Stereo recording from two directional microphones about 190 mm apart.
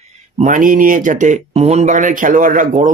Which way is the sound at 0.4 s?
45° right (ahead or behind).